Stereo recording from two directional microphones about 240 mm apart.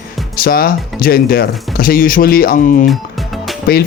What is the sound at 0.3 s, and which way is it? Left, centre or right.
Speech, left.